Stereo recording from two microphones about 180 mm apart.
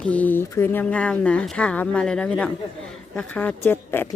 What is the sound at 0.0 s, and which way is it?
Speech, 10° left (ahead or behind).